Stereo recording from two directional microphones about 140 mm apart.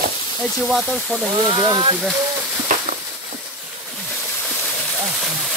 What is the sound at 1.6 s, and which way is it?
Speech, 25° right (ahead or behind).